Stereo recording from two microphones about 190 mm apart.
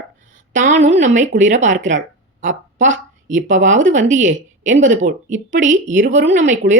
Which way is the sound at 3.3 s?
40° right (ahead or behind).